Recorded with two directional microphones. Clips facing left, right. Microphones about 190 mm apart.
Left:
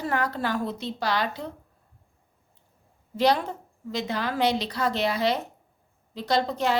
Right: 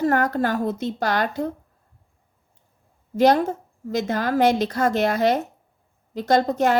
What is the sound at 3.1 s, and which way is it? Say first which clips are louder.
A woman's voice: right 6 dB; 45° right (ahead or behind).